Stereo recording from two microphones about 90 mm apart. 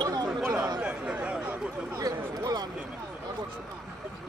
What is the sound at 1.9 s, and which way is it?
Speech, 45° right (ahead or behind).